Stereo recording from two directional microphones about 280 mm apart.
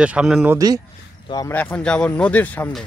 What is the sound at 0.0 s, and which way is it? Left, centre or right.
Speech, centre.